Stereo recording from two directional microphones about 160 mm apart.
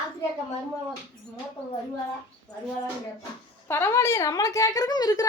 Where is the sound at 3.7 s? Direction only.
15° left (ahead or behind).